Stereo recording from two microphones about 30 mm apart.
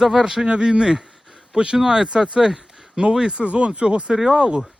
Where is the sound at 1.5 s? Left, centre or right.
Right.